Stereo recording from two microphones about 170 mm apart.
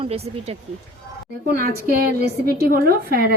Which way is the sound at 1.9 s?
65° right (ahead or behind).